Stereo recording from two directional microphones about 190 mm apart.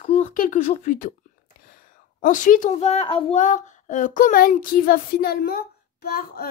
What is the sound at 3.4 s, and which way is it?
Speech, 40° left (ahead or behind).